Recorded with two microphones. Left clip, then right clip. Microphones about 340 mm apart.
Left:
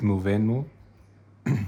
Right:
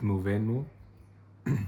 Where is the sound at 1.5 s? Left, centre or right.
Left.